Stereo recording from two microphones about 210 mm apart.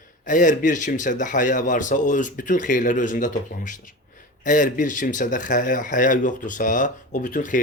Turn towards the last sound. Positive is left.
turn(degrees=40)  # may be behind; listen again after turning